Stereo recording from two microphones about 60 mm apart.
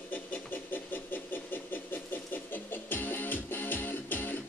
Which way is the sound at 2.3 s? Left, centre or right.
Left.